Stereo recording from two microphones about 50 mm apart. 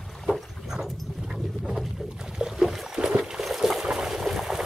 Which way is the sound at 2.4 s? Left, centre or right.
Centre.